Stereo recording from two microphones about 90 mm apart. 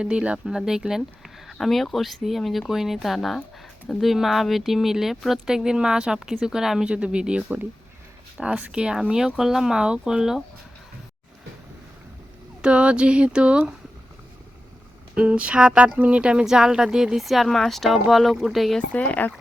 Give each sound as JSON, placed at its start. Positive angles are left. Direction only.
{"t": 0.0, "sound": "speech", "side_deg": -10}
{"t": 12.6, "sound": "speech", "side_deg": -10}
{"t": 15.1, "sound": "speech", "side_deg": -15}
{"t": 18.8, "sound": "speech", "side_deg": 15}